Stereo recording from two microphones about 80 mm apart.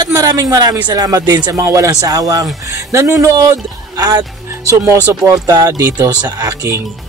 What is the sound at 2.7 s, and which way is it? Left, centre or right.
Speech, right.